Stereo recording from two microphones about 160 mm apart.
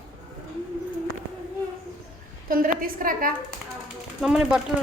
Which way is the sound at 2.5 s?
60° right (ahead or behind).